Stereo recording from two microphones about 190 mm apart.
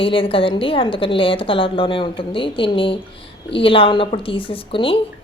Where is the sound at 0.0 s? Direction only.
30° left (ahead or behind).